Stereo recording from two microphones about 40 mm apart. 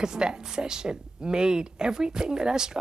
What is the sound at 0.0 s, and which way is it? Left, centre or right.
Speech, centre.